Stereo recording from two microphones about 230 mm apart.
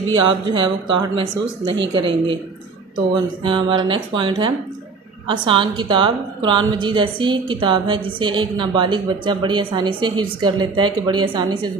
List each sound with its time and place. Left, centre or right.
0.3 s a woman's voice: right
3.4 s a woman's voice: right